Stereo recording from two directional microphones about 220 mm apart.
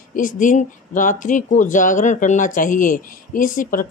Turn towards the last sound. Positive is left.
turn(degrees=40)  # may be behind; listen again after turning